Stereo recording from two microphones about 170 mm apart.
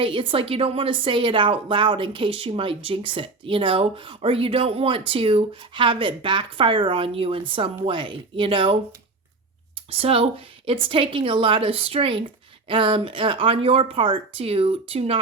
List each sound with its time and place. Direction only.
0.0 s a woman's voice: 30° right (ahead or behind)
9.9 s a woman's voice: 35° right (ahead or behind)